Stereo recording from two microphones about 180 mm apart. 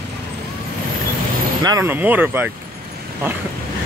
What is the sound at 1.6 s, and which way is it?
Speech, 15° right (ahead or behind).